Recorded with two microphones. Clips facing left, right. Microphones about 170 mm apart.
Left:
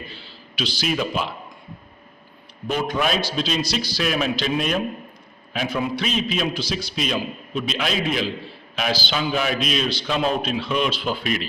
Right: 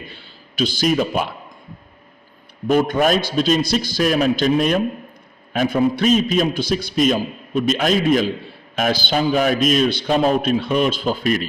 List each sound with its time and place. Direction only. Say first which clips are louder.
0.1 s a man's voice: left 1 dB; 50° right (ahead or behind)
2.6 s a man's voice: right 7 dB; 50° right (ahead or behind)